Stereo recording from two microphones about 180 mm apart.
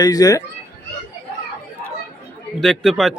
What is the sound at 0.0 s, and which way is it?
Speech, 20° left (ahead or behind).